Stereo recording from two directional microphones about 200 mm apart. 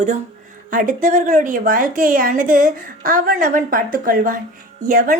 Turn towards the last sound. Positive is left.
turn(degrees=-40)  # may be behind; listen again after turning